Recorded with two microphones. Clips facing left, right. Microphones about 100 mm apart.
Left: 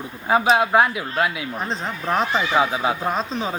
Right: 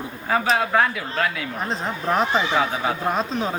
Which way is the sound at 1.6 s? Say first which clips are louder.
Right 2 dB; centre (ahead or behind).